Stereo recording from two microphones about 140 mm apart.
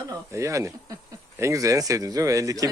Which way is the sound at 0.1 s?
20° right (ahead or behind).